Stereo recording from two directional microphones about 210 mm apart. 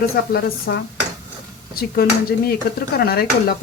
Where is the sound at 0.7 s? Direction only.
55° left (ahead or behind).